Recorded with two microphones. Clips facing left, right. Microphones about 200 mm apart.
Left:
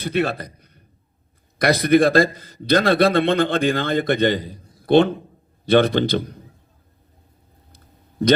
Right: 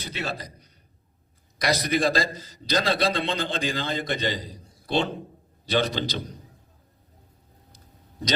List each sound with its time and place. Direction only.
0.0 s a man's voice: 55° left (ahead or behind)